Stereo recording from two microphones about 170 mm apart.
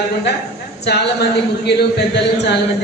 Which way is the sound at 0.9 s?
75° left (ahead or behind).